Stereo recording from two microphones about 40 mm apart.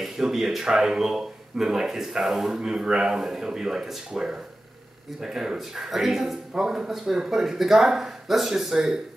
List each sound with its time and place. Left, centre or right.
0.0 s speech: centre
8.7 s speech: centre